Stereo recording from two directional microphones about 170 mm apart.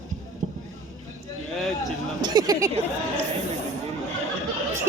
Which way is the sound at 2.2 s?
20° right (ahead or behind).